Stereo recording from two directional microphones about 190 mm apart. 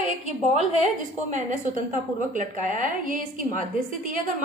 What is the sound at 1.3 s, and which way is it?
A woman's voice, 40° right (ahead or behind).